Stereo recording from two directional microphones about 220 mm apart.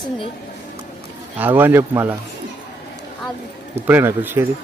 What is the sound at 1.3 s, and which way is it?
Speech, 10° right (ahead or behind).